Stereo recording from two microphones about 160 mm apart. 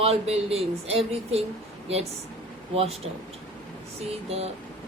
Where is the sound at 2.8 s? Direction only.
40° right (ahead or behind).